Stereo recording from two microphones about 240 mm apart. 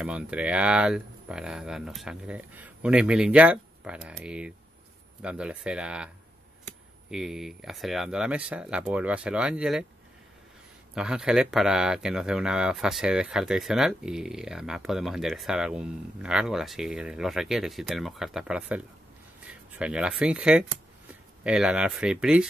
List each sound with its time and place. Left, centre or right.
0.0 s speech: centre
7.1 s speech: centre
11.0 s speech: centre